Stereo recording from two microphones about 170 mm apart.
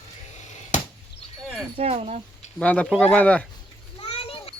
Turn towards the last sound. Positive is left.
turn(degrees=35)  # may be behind; listen again after turning